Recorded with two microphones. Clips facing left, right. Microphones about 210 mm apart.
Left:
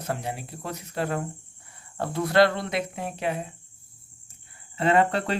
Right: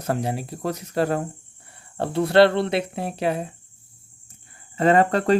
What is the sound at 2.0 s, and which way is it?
Cricket, 30° right (ahead or behind).